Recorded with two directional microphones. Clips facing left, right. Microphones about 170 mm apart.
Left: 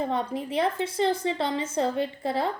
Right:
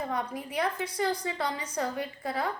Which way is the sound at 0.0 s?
25° left (ahead or behind).